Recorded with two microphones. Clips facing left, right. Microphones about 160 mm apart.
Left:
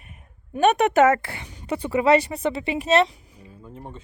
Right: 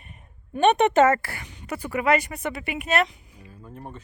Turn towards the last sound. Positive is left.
turn(degrees=30)  # may be behind; listen again after turning